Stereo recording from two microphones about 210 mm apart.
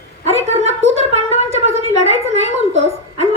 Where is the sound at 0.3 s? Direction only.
30° right (ahead or behind).